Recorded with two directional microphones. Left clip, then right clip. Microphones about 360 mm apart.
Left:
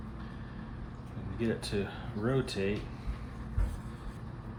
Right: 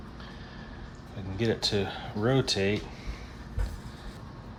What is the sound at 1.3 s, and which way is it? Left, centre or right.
Speech, right.